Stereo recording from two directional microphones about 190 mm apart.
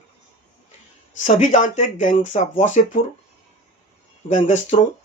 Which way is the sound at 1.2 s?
40° left (ahead or behind).